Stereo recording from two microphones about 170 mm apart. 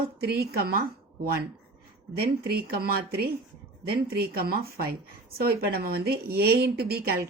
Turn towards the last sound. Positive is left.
turn(degrees=-65)  # may be behind; listen again after turning